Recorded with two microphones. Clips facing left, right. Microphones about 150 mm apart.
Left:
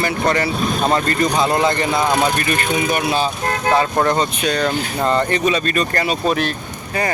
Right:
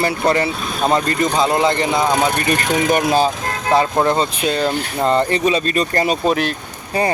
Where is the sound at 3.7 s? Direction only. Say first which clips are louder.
Right 2 dB; 25° right (ahead or behind).